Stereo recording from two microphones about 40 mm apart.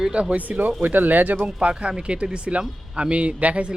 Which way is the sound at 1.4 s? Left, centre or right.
Right.